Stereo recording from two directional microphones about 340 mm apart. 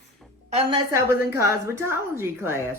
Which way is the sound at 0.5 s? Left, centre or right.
Centre.